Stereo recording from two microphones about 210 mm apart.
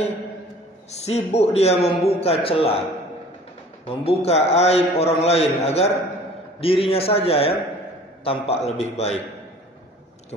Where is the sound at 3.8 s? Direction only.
25° left (ahead or behind).